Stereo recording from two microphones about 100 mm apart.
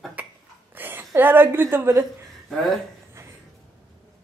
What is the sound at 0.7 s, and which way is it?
A woman's voice, 20° right (ahead or behind).